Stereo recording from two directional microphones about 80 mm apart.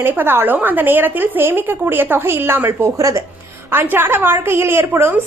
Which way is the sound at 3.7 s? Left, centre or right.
Right.